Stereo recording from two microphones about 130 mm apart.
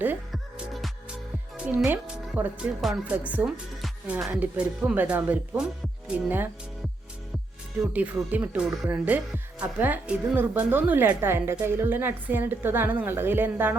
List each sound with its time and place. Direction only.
0.3 s music: centre (ahead or behind)
1.5 s speech: 10° right (ahead or behind)
7.9 s speech: 10° right (ahead or behind)